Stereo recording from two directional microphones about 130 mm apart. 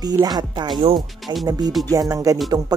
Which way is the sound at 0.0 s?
30° right (ahead or behind).